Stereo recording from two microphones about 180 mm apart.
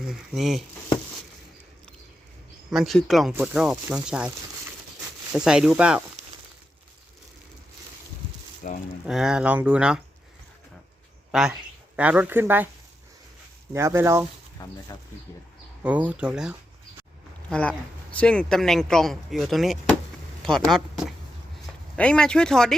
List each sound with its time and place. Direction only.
0.1 s speech: centre (ahead or behind)
2.6 s speech: centre (ahead or behind)
5.3 s speech: 5° right (ahead or behind)
8.6 s cattle: 45° left (ahead or behind)
9.0 s speech: 5° right (ahead or behind)
11.3 s speech: 5° right (ahead or behind)
13.7 s speech: 15° right (ahead or behind)
14.6 s speech: 20° left (ahead or behind)
15.8 s speech: 10° right (ahead or behind)
17.5 s speech: 5° left (ahead or behind)